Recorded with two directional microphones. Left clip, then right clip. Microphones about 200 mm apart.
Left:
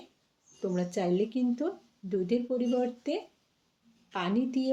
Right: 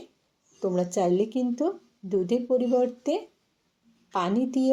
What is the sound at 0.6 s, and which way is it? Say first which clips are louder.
Speech: right 6 dB; 20° right (ahead or behind).